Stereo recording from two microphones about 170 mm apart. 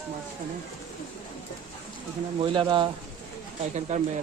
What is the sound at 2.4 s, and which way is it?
Speech, 30° right (ahead or behind).